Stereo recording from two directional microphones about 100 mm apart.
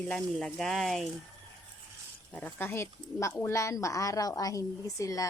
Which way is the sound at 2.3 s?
20° left (ahead or behind).